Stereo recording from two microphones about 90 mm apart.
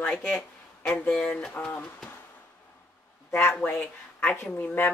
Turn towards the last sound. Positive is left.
turn(degrees=20)  # may be behind; listen again after turning